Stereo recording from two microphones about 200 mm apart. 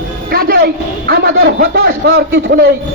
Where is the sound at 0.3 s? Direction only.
50° right (ahead or behind).